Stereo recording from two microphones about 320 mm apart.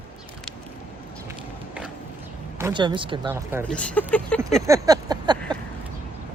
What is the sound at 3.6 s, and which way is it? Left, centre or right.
Speech, centre.